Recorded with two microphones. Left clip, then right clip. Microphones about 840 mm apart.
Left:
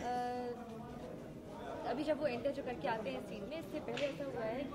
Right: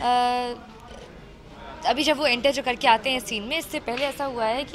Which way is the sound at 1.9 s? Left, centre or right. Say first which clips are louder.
Right 16 dB; right.